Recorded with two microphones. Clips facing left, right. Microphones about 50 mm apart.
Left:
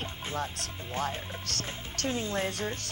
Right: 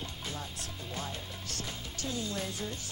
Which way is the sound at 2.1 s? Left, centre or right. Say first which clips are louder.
Left 6 dB; left.